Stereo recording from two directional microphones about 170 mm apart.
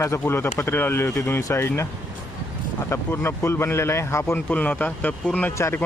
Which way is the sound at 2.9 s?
15° left (ahead or behind).